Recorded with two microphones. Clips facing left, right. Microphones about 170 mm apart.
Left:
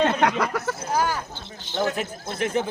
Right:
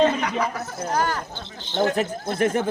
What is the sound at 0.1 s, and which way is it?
Speech, 65° left (ahead or behind).